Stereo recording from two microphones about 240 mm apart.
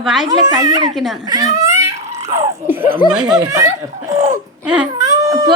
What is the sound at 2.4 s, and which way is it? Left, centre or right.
Laughter, centre.